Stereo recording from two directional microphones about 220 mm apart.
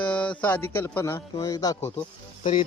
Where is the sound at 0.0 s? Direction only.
5° left (ahead or behind).